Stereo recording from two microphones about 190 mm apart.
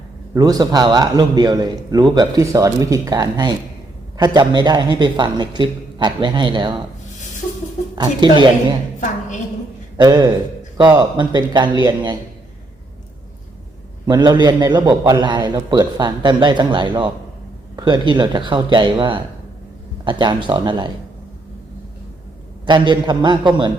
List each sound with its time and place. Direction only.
0.3 s a man's voice: 20° right (ahead or behind)
7.9 s a man's voice: 20° right (ahead or behind)
10.0 s a man's voice: 20° right (ahead or behind)
14.1 s a man's voice: 20° right (ahead or behind)
22.6 s a man's voice: 25° right (ahead or behind)